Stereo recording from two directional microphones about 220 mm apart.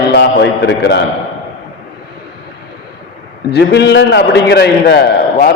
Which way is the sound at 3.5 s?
50° left (ahead or behind).